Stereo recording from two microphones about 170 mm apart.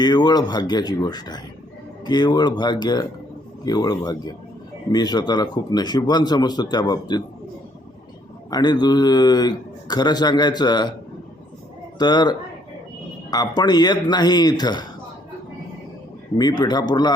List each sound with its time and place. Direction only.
0.0 s speech: 25° left (ahead or behind)
8.4 s speech: 25° left (ahead or behind)
11.9 s speech: 25° left (ahead or behind)
16.4 s speech: 25° left (ahead or behind)